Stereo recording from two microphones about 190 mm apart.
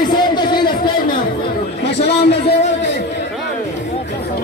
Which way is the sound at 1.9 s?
60° left (ahead or behind).